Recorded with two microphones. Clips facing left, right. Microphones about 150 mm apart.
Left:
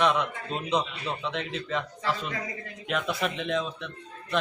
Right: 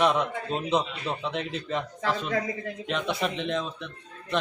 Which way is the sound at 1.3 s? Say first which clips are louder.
Right 1 dB; 35° right (ahead or behind).